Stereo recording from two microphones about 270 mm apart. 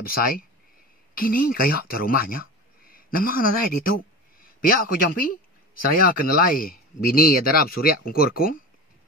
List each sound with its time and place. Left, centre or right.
0.0 s speech: left